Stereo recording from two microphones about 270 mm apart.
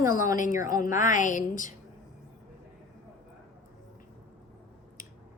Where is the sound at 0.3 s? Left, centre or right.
Left.